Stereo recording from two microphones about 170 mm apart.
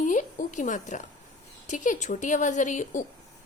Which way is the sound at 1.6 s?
45° left (ahead or behind).